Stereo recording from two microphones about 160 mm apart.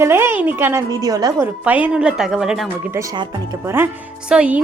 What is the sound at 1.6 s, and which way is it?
Speech, 10° right (ahead or behind).